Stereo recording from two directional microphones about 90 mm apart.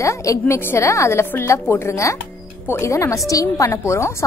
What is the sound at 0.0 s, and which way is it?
Speech, 35° left (ahead or behind).